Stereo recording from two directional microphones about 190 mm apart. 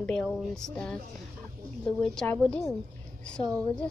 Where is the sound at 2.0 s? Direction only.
5° left (ahead or behind).